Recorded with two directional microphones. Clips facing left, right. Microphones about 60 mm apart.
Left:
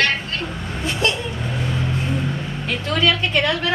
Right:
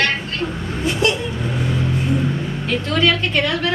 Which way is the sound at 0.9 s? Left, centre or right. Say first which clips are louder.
Right 3 dB; centre.